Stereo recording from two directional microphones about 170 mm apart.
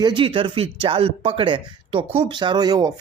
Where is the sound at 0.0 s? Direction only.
30° right (ahead or behind).